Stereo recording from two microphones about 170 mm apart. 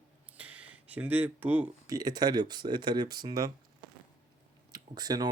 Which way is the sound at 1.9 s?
20° right (ahead or behind).